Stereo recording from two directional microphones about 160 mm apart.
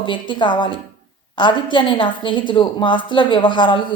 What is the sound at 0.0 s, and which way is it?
Speech, 30° left (ahead or behind).